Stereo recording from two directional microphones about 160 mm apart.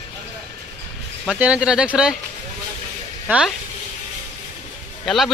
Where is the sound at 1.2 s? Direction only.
5° right (ahead or behind).